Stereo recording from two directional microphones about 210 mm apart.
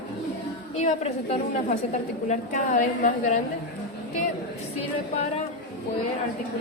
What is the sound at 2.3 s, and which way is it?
A woman's voice, 35° left (ahead or behind).